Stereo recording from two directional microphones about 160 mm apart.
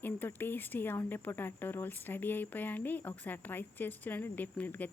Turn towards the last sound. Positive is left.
turn(degrees=10)  # may be behind; listen again after turning